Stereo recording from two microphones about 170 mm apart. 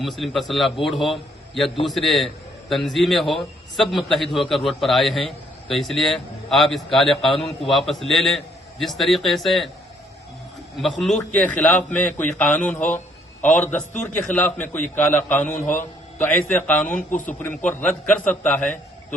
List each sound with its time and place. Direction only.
0.2 s a man's voice: centre (ahead or behind)
10.8 s a man's voice: centre (ahead or behind)
17.1 s a man's voice: 50° left (ahead or behind)
17.7 s a man's voice: 5° left (ahead or behind)